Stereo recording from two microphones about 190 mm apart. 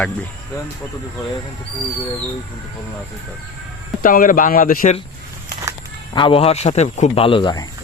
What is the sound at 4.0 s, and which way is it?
Speech, 45° left (ahead or behind).